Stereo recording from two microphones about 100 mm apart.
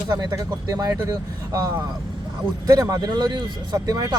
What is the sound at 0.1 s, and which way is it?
Speech, 35° right (ahead or behind).